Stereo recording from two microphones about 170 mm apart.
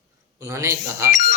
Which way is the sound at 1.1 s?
50° left (ahead or behind).